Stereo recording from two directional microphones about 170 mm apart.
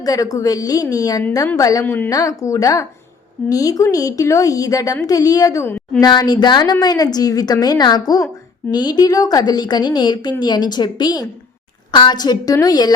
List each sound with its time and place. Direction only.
0.0 s a woman's voice: 20° left (ahead or behind)
6.0 s a woman's voice: 25° left (ahead or behind)